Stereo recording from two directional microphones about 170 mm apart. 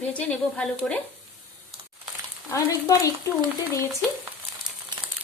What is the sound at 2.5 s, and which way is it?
Speech, 20° left (ahead or behind).